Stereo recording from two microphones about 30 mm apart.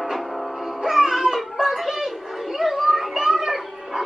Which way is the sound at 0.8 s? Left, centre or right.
Centre.